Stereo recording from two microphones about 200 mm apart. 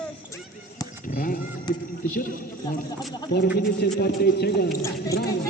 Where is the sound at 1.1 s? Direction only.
45° left (ahead or behind).